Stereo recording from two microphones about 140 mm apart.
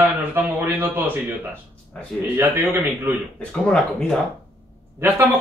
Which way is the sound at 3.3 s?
5° left (ahead or behind).